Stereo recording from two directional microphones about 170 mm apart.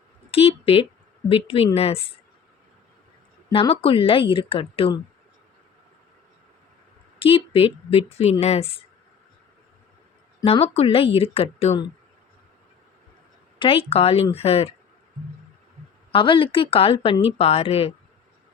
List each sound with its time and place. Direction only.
0.3 s a woman's voice: 35° left (ahead or behind)
3.5 s a woman's voice: 35° left (ahead or behind)
7.2 s a woman's voice: 35° left (ahead or behind)
10.4 s a woman's voice: 35° left (ahead or behind)
13.6 s a woman's voice: 35° left (ahead or behind)
16.1 s a woman's voice: 30° left (ahead or behind)